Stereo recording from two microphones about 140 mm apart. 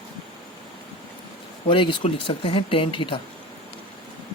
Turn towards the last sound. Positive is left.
turn(degrees=35)  # may be behind; listen again after turning